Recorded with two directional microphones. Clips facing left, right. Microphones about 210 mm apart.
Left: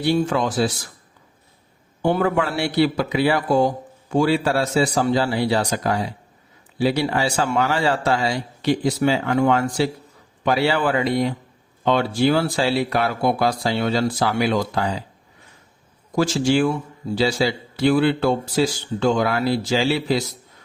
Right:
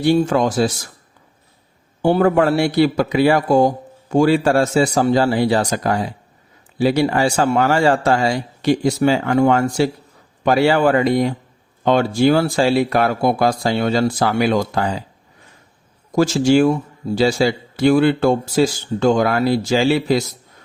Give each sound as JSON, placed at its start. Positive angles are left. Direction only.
{"t": 0.0, "sound": "speech", "side_deg": -45}
{"t": 2.0, "sound": "speech", "side_deg": -40}
{"t": 16.1, "sound": "speech", "side_deg": -45}